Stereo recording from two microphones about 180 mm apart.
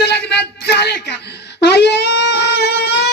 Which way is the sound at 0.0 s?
65° left (ahead or behind).